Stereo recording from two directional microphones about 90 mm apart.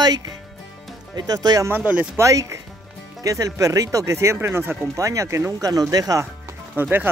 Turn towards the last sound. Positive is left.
turn(degrees=-20)  # may be behind; listen again after turning